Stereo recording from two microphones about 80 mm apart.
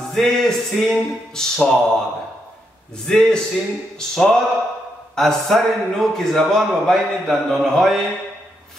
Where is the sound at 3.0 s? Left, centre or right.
Centre.